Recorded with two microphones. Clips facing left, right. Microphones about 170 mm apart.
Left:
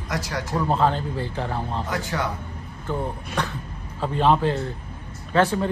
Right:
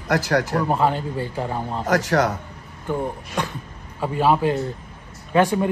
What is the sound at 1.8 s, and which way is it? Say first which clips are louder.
Speech: right 8 dB; 75° right (ahead or behind).